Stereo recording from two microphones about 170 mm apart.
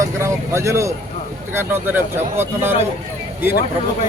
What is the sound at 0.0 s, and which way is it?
A man's voice, 15° right (ahead or behind).